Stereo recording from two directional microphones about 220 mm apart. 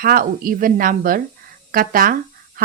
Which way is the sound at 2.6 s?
40° right (ahead or behind).